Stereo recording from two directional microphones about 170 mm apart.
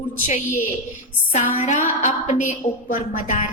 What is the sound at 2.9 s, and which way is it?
Speech, 35° left (ahead or behind).